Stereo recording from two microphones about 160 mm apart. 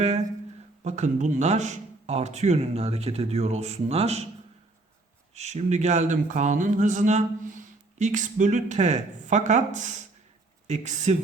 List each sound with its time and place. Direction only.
0.9 s speech: 45° right (ahead or behind)
5.3 s speech: 45° right (ahead or behind)